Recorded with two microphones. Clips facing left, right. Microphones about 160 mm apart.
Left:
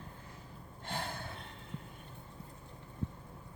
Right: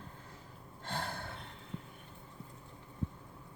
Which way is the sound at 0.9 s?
15° left (ahead or behind).